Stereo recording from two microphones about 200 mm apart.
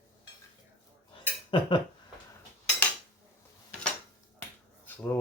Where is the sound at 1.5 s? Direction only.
25° left (ahead or behind).